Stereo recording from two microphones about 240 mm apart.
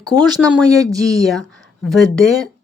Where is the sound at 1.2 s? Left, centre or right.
Centre.